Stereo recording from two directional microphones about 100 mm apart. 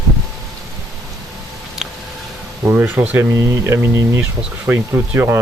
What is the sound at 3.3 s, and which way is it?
Speech, 30° right (ahead or behind).